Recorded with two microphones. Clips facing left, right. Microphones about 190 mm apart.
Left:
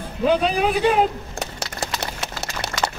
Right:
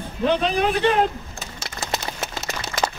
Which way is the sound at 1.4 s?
70° left (ahead or behind).